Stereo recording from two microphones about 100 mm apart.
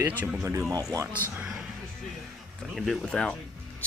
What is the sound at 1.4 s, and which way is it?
Speech, 10° right (ahead or behind).